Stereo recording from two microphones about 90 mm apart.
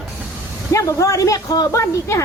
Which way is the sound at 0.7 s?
35° left (ahead or behind).